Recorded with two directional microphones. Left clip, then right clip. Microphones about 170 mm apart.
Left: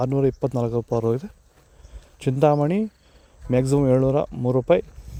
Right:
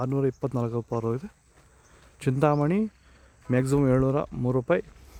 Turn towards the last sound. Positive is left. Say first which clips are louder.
# left 6 dB
turn(degrees=15)  # may be behind; listen again after turning